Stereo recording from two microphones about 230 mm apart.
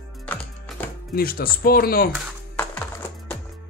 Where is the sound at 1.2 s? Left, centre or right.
Left.